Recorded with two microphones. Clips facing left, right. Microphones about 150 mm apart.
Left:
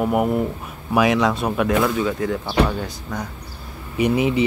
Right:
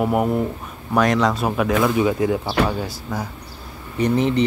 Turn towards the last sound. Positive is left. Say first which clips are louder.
# even
turn(degrees=10)  # may be behind; listen again after turning